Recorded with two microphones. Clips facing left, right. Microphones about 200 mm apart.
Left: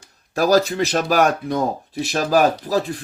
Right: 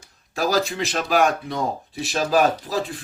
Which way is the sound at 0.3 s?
45° left (ahead or behind).